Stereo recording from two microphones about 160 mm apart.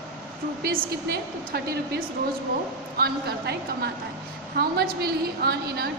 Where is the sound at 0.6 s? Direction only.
70° right (ahead or behind).